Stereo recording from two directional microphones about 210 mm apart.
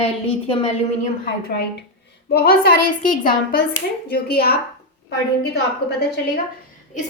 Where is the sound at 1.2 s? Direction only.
45° left (ahead or behind).